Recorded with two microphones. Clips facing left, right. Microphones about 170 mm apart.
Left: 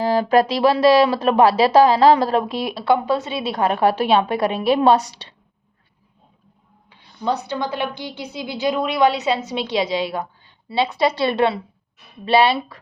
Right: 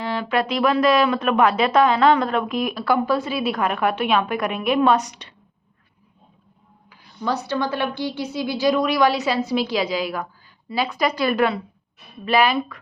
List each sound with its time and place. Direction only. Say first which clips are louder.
0.0 s speech: left 7 dB; 40° left (ahead or behind)
6.9 s a woman's voice: left 2 dB; 25° left (ahead or behind)